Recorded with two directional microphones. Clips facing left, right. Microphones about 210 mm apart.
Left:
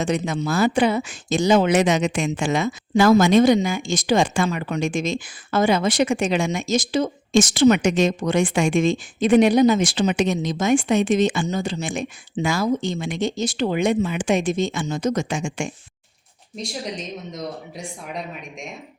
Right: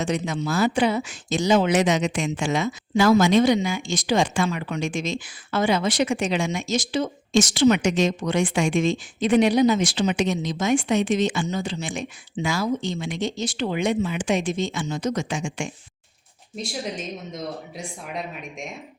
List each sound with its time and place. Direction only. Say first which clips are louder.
0.0 s speech: left 2 dB; 55° left (ahead or behind)
16.6 s speech: even; centre (ahead or behind)